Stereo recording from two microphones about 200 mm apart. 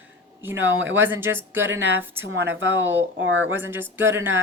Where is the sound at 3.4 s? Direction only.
10° right (ahead or behind).